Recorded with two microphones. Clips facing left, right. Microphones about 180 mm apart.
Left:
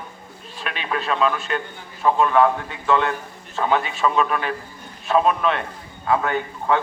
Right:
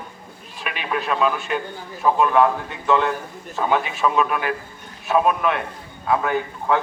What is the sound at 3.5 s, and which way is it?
A man's voice, 5° right (ahead or behind).